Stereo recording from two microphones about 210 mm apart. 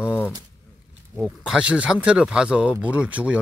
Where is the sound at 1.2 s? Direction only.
5° right (ahead or behind).